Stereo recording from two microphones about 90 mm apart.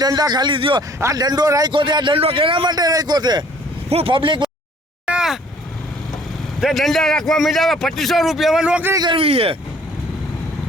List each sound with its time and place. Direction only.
0.0 s speech: 45° right (ahead or behind); by 0.8 s 65° right (ahead or behind)
1.1 s speech: 50° right (ahead or behind)
1.7 s a man's voice: 60° right (ahead or behind)
2.7 s speech: 45° right (ahead or behind)
3.8 s a man's voice: 80° right; by 4.4 s 65° right (ahead or behind)
5.0 s vehicle: 10° right (ahead or behind)
6.6 s a man's voice: centre (ahead or behind)
9.1 s speech: 90° right